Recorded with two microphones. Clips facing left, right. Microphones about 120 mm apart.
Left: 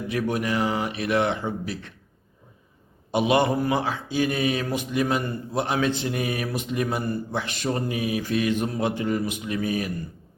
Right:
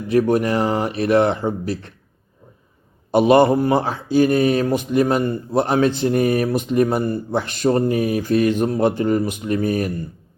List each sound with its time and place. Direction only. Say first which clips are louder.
0.1 s speech: right 9 dB; 35° right (ahead or behind)
3.1 s speech: right 8 dB; 40° right (ahead or behind)